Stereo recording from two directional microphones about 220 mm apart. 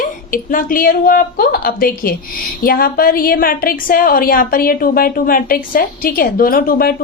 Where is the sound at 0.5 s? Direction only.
40° left (ahead or behind).